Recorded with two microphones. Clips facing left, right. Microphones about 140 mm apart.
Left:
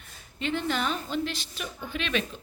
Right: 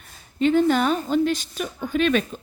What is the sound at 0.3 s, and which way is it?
Speech, 45° right (ahead or behind).